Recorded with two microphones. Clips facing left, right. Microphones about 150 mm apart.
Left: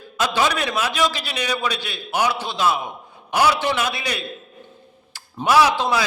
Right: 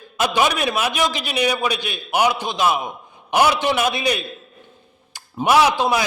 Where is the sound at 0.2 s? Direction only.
15° right (ahead or behind).